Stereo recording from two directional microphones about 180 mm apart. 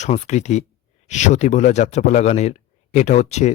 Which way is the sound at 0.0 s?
40° left (ahead or behind).